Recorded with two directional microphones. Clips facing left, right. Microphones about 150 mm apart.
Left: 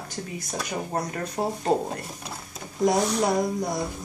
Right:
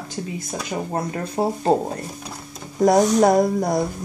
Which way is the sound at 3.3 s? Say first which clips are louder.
Right 7 dB; 60° right (ahead or behind).